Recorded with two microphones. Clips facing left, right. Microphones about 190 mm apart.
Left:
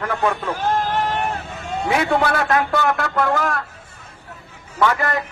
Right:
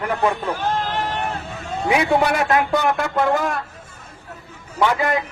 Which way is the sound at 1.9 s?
20° right (ahead or behind).